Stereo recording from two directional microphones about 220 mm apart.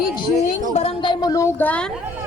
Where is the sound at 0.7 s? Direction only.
25° left (ahead or behind); by 1.9 s 5° left (ahead or behind).